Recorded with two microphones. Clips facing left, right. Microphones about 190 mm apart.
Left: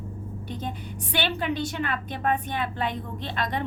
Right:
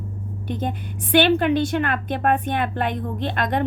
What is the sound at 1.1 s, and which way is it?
A woman's voice, 75° right (ahead or behind).